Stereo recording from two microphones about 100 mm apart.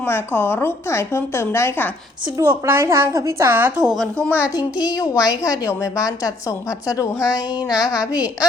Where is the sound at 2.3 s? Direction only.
25° right (ahead or behind).